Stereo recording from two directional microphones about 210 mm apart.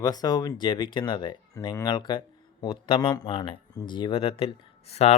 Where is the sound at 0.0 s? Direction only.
20° left (ahead or behind).